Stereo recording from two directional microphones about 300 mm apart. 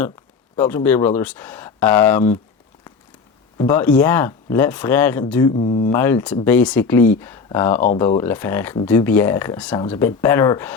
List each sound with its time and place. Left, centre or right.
0.5 s speech: centre
3.6 s speech: centre
5.9 s speech: centre